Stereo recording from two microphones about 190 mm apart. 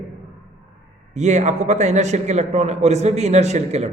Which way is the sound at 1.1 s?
40° right (ahead or behind).